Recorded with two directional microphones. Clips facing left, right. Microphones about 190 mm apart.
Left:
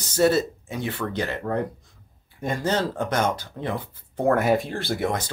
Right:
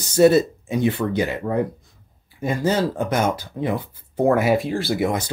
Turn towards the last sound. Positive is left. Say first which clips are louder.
# right 4 dB
turn(degrees=-10)  # may be behind; listen again after turning